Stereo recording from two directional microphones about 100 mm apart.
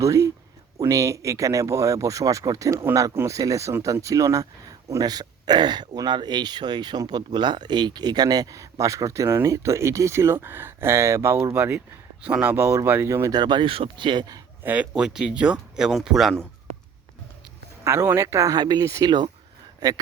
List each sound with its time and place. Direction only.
0.0 s speech: 30° right (ahead or behind)
13.3 s speech: 45° right (ahead or behind)
14.6 s speech: 15° right (ahead or behind)
14.9 s speech: 5° right (ahead or behind)
17.8 s speech: 25° right (ahead or behind); by 19.3 s 45° right (ahead or behind)